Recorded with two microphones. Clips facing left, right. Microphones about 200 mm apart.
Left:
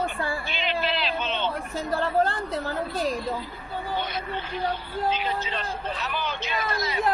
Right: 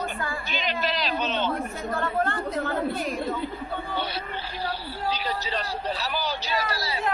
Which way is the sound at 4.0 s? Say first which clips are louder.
Left 1 dB; 35° right (ahead or behind).